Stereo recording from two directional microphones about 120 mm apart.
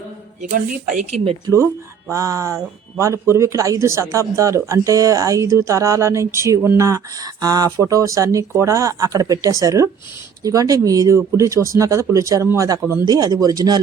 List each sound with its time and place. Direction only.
2.0 s a man's voice: 25° right (ahead or behind)